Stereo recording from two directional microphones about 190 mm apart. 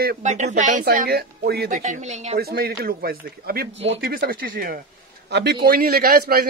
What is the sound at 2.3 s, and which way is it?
A man's voice, 55° right (ahead or behind).